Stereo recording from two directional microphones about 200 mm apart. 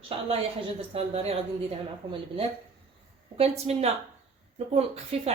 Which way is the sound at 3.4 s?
30° right (ahead or behind).